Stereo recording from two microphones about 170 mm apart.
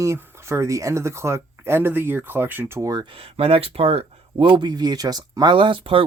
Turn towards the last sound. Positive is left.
turn(degrees=-30)  # may be behind; listen again after turning